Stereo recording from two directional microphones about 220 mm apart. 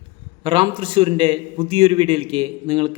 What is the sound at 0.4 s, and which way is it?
A man's voice, 25° right (ahead or behind).